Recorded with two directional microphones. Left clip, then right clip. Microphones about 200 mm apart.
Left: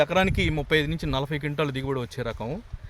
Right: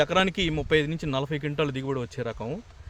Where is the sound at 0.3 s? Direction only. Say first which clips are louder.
Even; 10° left (ahead or behind).